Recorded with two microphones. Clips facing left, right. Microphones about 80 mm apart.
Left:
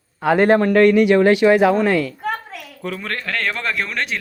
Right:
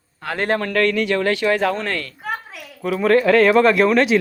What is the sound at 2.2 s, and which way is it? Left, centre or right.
Speech, centre.